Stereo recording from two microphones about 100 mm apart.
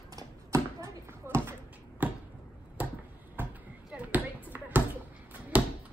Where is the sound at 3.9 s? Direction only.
15° right (ahead or behind).